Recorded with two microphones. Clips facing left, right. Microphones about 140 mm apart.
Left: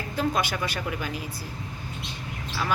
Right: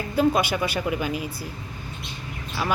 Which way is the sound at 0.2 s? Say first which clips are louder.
Right 6 dB; 10° right (ahead or behind).